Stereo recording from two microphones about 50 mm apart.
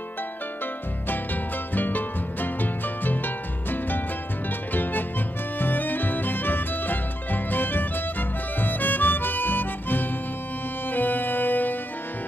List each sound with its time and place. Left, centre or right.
1.0 s music: left
5.6 s music: left